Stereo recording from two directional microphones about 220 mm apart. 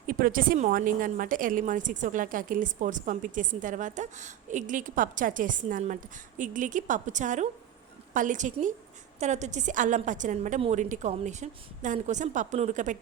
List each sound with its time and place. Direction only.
0.1 s a woman's voice: 40° right (ahead or behind)